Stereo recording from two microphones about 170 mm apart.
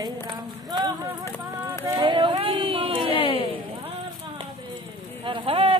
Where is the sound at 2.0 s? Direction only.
30° right (ahead or behind).